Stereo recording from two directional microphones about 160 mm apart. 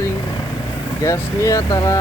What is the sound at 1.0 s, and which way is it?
Speech, 20° left (ahead or behind).